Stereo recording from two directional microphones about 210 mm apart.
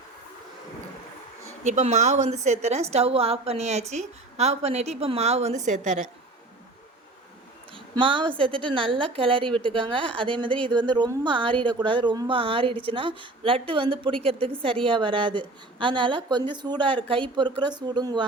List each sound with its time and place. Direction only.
1.6 s a woman's voice: 35° right (ahead or behind)
7.9 s a woman's voice: 25° right (ahead or behind)